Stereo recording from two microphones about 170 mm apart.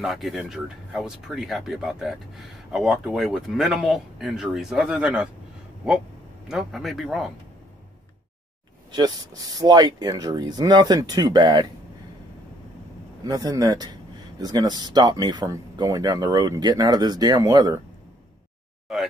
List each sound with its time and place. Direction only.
0.0 s speech: centre (ahead or behind)
6.5 s speech: centre (ahead or behind)
8.9 s speech: 25° right (ahead or behind)
13.2 s speech: 20° right (ahead or behind)
18.9 s speech: centre (ahead or behind)